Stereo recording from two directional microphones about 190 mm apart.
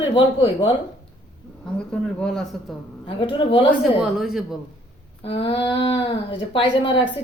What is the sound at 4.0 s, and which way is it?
Speech, centre (ahead or behind).